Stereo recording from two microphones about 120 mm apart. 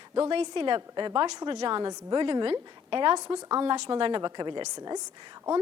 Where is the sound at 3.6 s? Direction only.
45° right (ahead or behind).